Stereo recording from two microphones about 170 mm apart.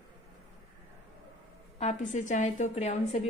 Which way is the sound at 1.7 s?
45° left (ahead or behind).